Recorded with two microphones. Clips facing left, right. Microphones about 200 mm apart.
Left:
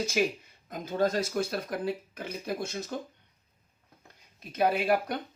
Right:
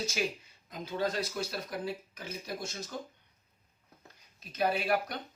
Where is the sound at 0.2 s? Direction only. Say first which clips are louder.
Left 6 dB; 55° left (ahead or behind).